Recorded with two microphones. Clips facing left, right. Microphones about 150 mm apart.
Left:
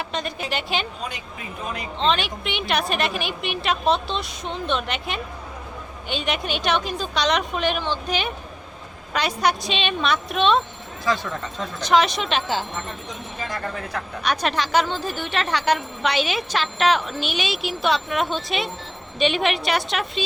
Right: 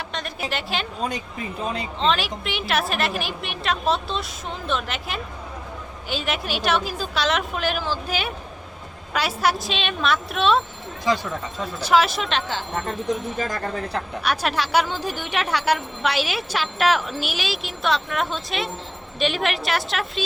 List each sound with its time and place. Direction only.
0.1 s a woman's voice: centre (ahead or behind)
1.6 s speech: 30° right (ahead or behind)
2.0 s a woman's voice: centre (ahead or behind)
14.3 s a woman's voice: 5° right (ahead or behind)